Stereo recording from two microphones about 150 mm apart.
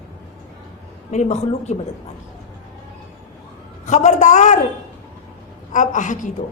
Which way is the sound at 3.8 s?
50° left (ahead or behind).